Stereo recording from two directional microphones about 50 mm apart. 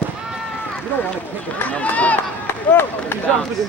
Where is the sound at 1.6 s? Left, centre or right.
Left.